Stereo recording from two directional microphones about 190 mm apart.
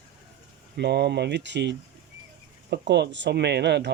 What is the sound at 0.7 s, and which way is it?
Speech, 60° right (ahead or behind).